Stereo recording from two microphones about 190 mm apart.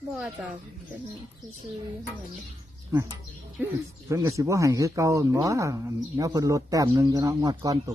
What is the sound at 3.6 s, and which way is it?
Speech, 10° right (ahead or behind).